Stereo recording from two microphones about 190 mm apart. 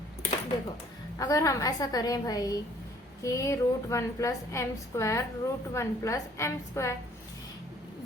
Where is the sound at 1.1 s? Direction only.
15° left (ahead or behind).